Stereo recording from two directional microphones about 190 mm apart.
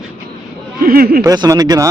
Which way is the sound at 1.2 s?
20° right (ahead or behind).